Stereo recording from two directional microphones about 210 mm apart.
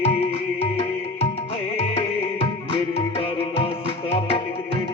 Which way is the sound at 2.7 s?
25° left (ahead or behind).